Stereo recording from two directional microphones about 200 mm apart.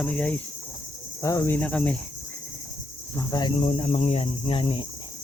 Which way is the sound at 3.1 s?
15° left (ahead or behind).